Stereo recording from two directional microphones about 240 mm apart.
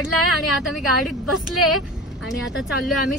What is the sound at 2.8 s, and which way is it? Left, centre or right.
Speech, centre.